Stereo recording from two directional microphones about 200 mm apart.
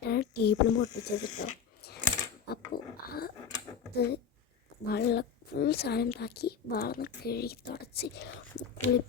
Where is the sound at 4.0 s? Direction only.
55° left (ahead or behind).